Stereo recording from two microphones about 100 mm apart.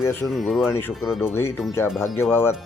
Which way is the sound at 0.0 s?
20° left (ahead or behind).